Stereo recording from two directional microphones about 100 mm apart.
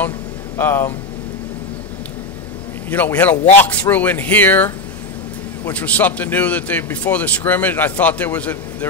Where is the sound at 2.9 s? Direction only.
20° left (ahead or behind).